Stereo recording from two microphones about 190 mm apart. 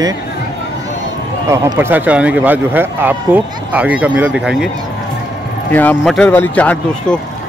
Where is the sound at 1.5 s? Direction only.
15° right (ahead or behind).